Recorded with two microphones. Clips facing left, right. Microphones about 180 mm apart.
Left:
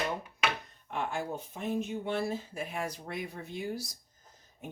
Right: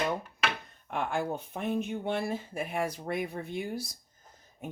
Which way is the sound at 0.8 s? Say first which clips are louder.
Right 3 dB; 55° right (ahead or behind).